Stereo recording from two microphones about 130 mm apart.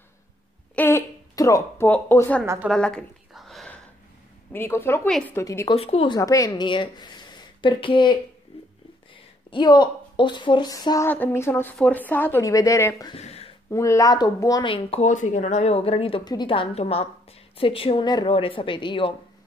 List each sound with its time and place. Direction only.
0.7 s hiccup: 15° left (ahead or behind)
1.3 s a woman's voice: 25° left (ahead or behind)
2.4 s a woman's voice: 20° right (ahead or behind)
2.7 s a sound: 5° left (ahead or behind)
4.5 s speech: 15° left (ahead or behind)
5.8 s a woman's voice: 45° left (ahead or behind)
6.1 s a woman's voice: 25° left (ahead or behind)
11.1 s a woman's voice: 15° left (ahead or behind)
13.1 s speech: 50° left (ahead or behind)
13.7 s speech: 25° left (ahead or behind)
14.7 s a woman's voice: 50° left (ahead or behind)
15.0 s a woman's voice: 70° left (ahead or behind); by 18.0 s 45° left (ahead or behind)
18.0 s speech: 30° left (ahead or behind)
18.3 s speech: 45° left (ahead or behind)